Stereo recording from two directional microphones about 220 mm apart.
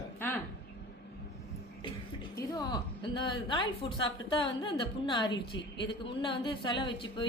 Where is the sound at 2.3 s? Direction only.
20° left (ahead or behind).